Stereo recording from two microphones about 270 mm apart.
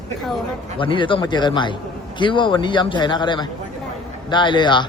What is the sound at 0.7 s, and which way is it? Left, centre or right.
A man's voice, centre.